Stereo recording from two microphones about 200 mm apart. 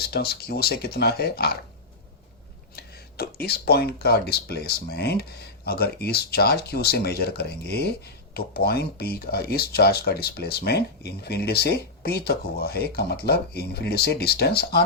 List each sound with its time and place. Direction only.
0.0 s speech: 50° left (ahead or behind)
2.7 s speech: 50° left (ahead or behind)